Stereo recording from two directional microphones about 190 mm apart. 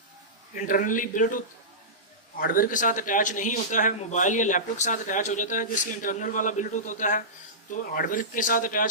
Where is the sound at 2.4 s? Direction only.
50° left (ahead or behind).